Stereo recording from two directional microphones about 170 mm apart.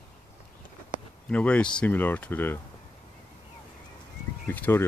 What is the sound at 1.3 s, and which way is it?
Speech, 10° left (ahead or behind).